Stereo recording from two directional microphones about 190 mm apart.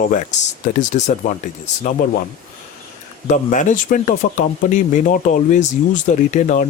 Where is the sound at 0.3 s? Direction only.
40° left (ahead or behind).